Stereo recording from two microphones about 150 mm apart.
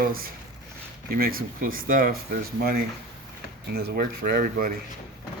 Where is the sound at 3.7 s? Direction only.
90° right; by 4.7 s 70° right (ahead or behind).